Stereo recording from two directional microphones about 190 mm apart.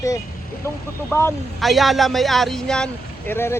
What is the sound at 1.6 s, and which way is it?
Speech, centre (ahead or behind).